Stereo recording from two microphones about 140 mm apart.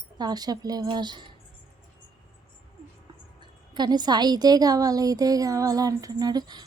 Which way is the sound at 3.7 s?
30° right (ahead or behind).